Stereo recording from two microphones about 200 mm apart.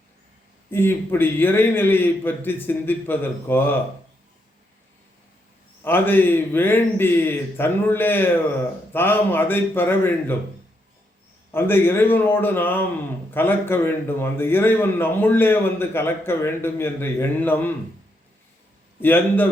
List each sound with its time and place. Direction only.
0.7 s a man's voice: 10° left (ahead or behind)
5.8 s a man's voice: 10° left (ahead or behind)
11.5 s a man's voice: 10° left (ahead or behind)
18.9 s a man's voice: 10° left (ahead or behind)